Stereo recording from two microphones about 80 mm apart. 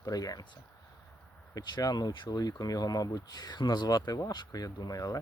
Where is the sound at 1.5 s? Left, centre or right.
Left.